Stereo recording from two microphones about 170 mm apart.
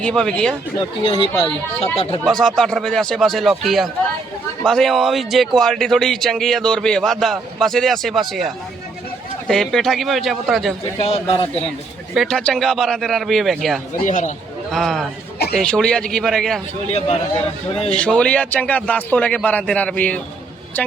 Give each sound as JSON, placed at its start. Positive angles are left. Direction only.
{"t": 0.0, "sound": "speech", "side_deg": 5}
{"t": 1.0, "sound": "a man's voice", "side_deg": 30}
{"t": 2.2, "sound": "speech", "side_deg": 0}
{"t": 11.0, "sound": "a man's voice", "side_deg": 35}
{"t": 12.1, "sound": "speech", "side_deg": 0}
{"t": 14.0, "sound": "speech", "side_deg": 50}
{"t": 14.7, "sound": "speech", "side_deg": 0}
{"t": 17.9, "sound": "a man's voice", "side_deg": 5}